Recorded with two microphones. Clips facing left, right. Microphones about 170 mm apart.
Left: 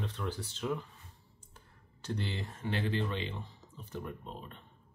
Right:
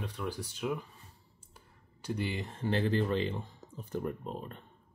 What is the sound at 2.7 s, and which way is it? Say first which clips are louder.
Speech: right 5 dB; 40° right (ahead or behind).